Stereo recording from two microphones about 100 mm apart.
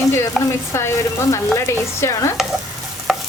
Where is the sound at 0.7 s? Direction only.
25° left (ahead or behind).